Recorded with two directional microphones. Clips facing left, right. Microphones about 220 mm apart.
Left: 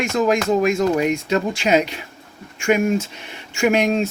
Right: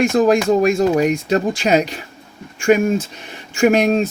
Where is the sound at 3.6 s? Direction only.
35° right (ahead or behind).